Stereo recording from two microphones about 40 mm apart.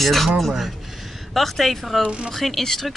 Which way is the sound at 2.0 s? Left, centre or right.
Right.